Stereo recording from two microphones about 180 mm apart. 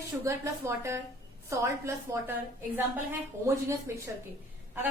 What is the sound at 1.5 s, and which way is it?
A woman's voice, 15° right (ahead or behind).